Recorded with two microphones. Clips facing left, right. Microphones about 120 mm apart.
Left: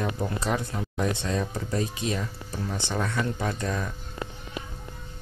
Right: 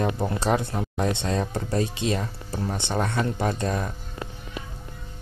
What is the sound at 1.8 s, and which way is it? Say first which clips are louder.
Speech: right 4 dB; 65° right (ahead or behind).